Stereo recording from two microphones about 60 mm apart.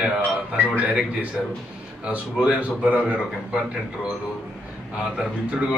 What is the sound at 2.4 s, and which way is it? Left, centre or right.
Speech, right.